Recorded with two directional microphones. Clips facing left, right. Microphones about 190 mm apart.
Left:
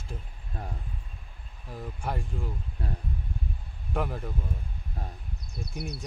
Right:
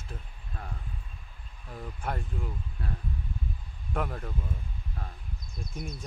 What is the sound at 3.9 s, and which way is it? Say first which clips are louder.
Speech: left 2 dB; 5° left (ahead or behind).